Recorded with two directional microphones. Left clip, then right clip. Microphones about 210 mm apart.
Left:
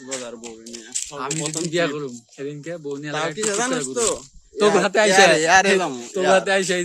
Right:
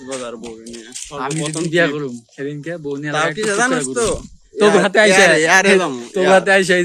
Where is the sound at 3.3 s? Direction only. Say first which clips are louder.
Right 6 dB; 15° left (ahead or behind).